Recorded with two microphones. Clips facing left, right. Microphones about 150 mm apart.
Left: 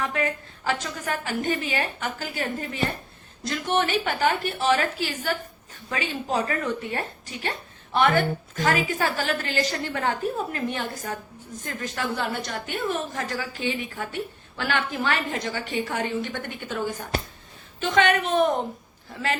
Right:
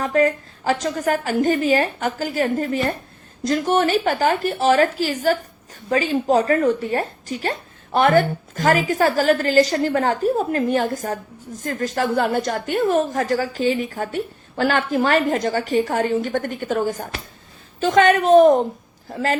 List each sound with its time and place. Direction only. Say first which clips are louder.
0.0 s a woman's voice: right 9 dB; 40° right (ahead or behind)